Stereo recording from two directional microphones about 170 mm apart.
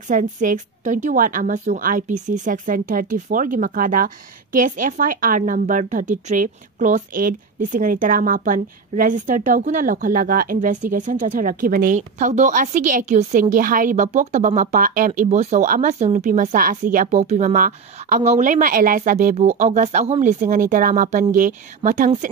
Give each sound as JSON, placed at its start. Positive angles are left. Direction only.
{"t": 0.1, "sound": "a woman's voice", "side_deg": -50}